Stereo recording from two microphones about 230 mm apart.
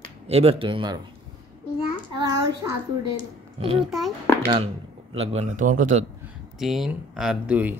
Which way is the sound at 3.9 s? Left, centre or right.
Centre.